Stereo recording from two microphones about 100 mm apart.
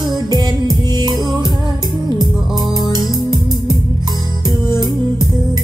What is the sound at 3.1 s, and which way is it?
Music, 45° right (ahead or behind).